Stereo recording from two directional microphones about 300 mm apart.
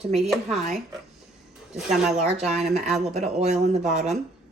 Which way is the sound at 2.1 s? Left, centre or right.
Right.